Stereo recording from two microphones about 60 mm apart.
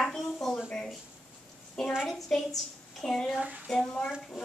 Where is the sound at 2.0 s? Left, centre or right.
Centre.